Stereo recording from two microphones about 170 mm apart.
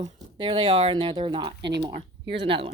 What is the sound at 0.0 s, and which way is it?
Speech, 25° right (ahead or behind).